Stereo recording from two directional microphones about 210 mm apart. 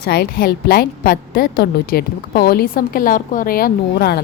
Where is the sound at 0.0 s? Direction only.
50° left (ahead or behind).